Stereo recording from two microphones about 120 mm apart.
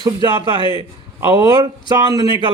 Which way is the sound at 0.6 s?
40° left (ahead or behind).